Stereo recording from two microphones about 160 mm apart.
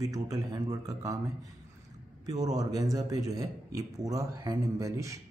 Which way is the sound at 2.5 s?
20° right (ahead or behind).